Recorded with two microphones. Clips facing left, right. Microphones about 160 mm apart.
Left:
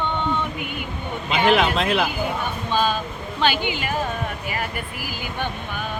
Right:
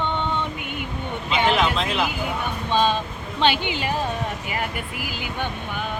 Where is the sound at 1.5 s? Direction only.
60° left (ahead or behind).